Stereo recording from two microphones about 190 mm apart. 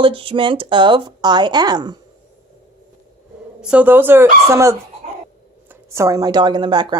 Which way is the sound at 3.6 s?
5° right (ahead or behind).